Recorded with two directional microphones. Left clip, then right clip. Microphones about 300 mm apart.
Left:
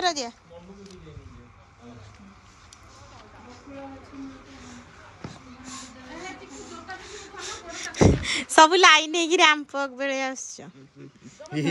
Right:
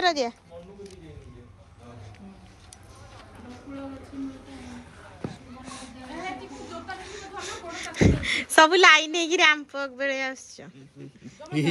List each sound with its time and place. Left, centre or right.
0.0 s speech: centre
5.3 s a sound: centre
11.4 s a man's voice: centre